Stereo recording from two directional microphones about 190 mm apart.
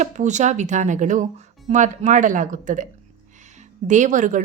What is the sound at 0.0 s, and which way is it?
A woman's voice, 40° right (ahead or behind).